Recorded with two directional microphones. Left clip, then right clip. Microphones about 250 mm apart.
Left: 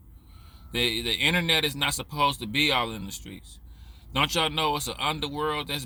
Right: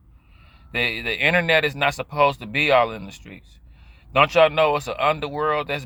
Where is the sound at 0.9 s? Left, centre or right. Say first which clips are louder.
Right 5 dB; centre.